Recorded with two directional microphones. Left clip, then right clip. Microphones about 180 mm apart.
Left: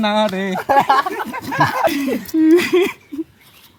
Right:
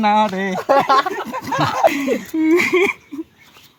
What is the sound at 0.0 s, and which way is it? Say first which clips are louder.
Speech: right 2 dB; 30° right (ahead or behind).